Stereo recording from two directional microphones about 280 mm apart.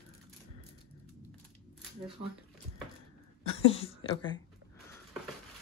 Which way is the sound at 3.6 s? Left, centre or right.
Centre.